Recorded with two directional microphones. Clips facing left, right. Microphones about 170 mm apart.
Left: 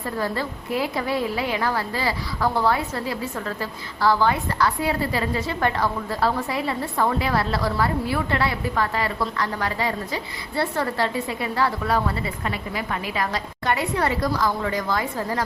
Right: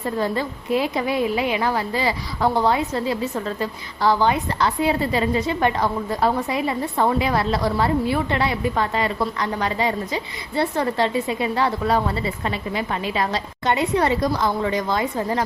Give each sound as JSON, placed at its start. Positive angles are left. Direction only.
{"t": 0.0, "sound": "a woman's voice", "side_deg": -20}